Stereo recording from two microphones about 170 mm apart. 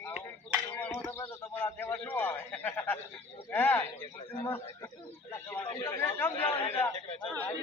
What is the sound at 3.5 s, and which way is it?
A man's voice, 10° left (ahead or behind).